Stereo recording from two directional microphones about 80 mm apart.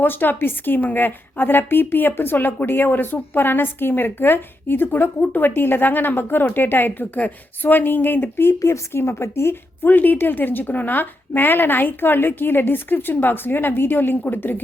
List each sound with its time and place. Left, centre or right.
0.0 s a woman's voice: left
8.5 s a woman's voice: left